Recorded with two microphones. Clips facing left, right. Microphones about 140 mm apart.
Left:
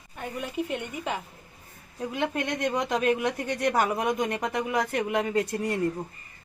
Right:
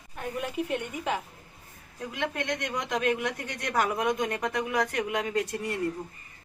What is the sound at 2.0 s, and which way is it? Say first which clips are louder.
Speech: left 4 dB; 25° left (ahead or behind).